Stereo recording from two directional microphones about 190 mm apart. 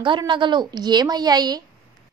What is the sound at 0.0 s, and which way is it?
A woman's voice, 25° right (ahead or behind).